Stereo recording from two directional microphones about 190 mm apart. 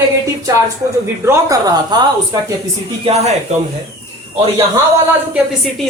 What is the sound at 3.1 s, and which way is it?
Speech, 35° right (ahead or behind).